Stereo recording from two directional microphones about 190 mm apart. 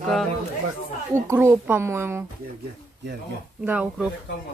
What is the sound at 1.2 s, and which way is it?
Speech, 10° right (ahead or behind).